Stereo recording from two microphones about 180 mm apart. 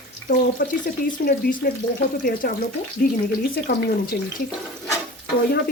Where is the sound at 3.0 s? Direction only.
55° left (ahead or behind).